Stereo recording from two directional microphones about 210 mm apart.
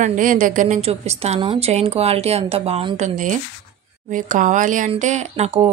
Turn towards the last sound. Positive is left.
turn(degrees=-30)  # may be behind; listen again after turning